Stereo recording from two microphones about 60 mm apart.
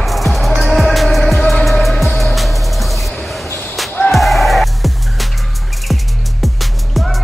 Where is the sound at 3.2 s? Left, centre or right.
Centre.